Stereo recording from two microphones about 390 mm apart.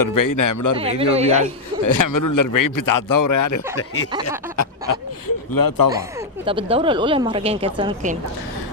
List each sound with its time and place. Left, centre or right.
0.0 s a man's voice: left
0.8 s speech: centre
1.8 s a man's voice: left
3.8 s a sound: left
5.5 s speech: left
5.9 s speech: centre